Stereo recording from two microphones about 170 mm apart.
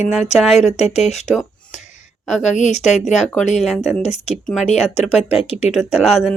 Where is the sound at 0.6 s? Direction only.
40° left (ahead or behind).